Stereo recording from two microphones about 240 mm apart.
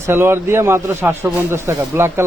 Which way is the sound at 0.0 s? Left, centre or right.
Centre.